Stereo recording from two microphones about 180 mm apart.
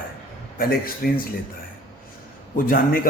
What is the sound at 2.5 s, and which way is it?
Speech, 50° left (ahead or behind).